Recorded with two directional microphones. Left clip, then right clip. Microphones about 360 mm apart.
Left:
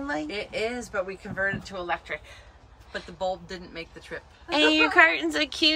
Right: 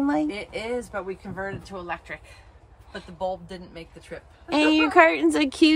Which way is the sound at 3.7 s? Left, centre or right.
Centre.